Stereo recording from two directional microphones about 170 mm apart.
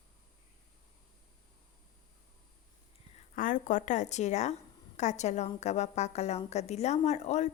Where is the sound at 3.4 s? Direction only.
50° left (ahead or behind).